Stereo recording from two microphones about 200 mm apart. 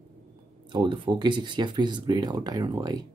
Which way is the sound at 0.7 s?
25° right (ahead or behind).